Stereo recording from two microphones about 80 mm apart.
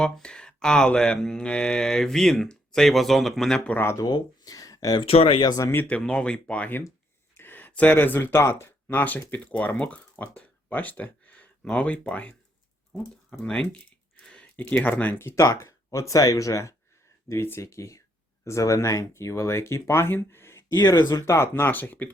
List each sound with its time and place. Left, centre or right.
0.0 s mantra: centre
3.7 s speech: left
3.9 s speech: left
4.9 s speech: left
6.0 s mantra: centre
7.3 s a sound: left
7.7 s speech: centre; by 8.7 s left
8.9 s speech: left
13.4 s speech: centre
15.4 s speech: left